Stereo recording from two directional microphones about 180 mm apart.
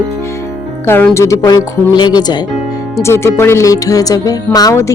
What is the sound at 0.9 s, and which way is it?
Speech, 10° left (ahead or behind).